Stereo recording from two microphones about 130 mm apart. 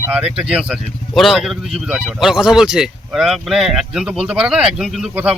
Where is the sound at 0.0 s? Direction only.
10° right (ahead or behind).